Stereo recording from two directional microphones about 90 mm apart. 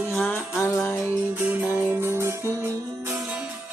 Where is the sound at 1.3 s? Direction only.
20° right (ahead or behind).